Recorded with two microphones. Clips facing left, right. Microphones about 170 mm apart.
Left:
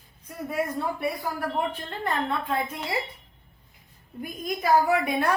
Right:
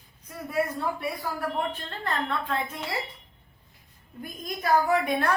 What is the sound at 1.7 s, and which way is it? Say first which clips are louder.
A woman's voice: left 2 dB; 15° left (ahead or behind).